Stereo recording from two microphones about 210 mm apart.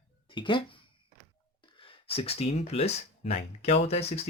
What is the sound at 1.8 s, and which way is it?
Speech, 30° left (ahead or behind).